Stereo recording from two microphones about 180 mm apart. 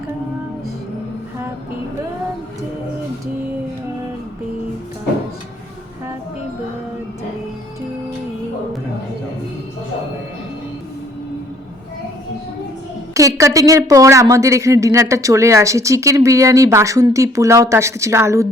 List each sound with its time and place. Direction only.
13.1 s speech: 15° right (ahead or behind)